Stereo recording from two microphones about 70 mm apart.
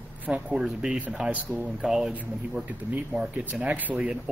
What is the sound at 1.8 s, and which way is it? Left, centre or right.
Speech, centre.